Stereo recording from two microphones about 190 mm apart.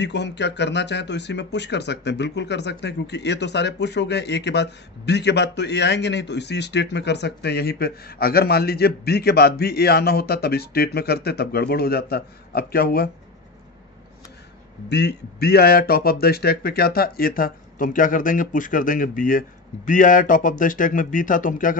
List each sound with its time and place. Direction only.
0.0 s speech: 65° left (ahead or behind)
14.9 s speech: 60° left (ahead or behind); by 21.7 s 45° left (ahead or behind)